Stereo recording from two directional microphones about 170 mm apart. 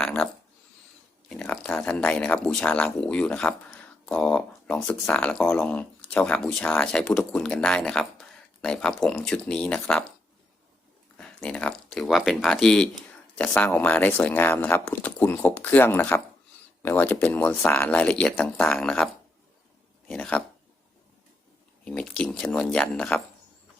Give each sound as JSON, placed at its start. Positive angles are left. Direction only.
{"t": 0.0, "sound": "a sound", "side_deg": 10}
{"t": 1.3, "sound": "speech", "side_deg": 5}
{"t": 11.2, "sound": "speech", "side_deg": 5}
{"t": 20.1, "sound": "speech", "side_deg": 5}
{"t": 21.8, "sound": "speech", "side_deg": 5}